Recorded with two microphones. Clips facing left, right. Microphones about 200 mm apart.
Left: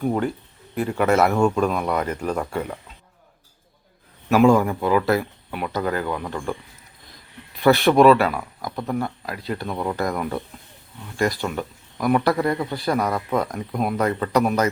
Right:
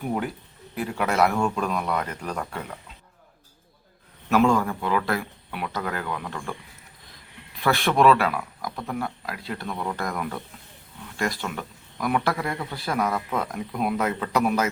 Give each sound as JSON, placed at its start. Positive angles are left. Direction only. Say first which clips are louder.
{"t": 0.8, "sound": "speech", "louder": "left 4 dB", "side_deg": 0}
{"t": 4.3, "sound": "speech", "louder": "left 5 dB", "side_deg": 10}
{"t": 7.6, "sound": "speech", "louder": "left 6 dB", "side_deg": 0}
{"t": 9.7, "sound": "speech", "louder": "left 4 dB", "side_deg": 15}
{"t": 10.0, "sound": "speech", "louder": "left 5 dB", "side_deg": 5}